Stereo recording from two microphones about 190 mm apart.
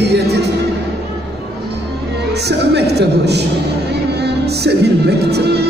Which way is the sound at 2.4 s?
60° right (ahead or behind).